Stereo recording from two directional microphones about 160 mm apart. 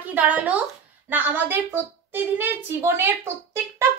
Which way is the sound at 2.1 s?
15° right (ahead or behind).